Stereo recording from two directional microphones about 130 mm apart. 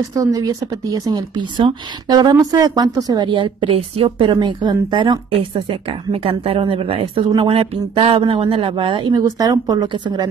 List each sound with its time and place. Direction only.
0.0 s speech: 25° right (ahead or behind)